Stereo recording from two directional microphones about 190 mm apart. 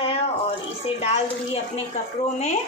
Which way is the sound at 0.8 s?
30° left (ahead or behind).